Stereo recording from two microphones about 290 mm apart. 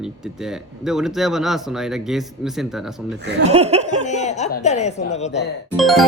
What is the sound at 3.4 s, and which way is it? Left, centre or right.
Laughter, right.